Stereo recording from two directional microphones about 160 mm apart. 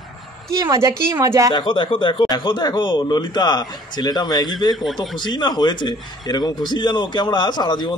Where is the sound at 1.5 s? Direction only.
30° left (ahead or behind).